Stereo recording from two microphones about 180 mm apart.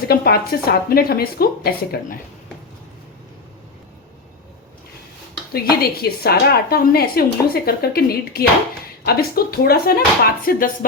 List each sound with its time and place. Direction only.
0.1 s a woman's voice: 60° left (ahead or behind)
5.6 s a woman's voice: 60° left (ahead or behind)